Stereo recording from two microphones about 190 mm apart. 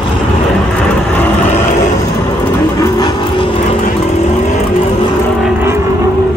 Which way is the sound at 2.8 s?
20° left (ahead or behind).